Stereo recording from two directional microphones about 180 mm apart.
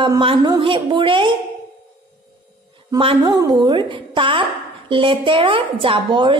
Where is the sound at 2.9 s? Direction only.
25° right (ahead or behind).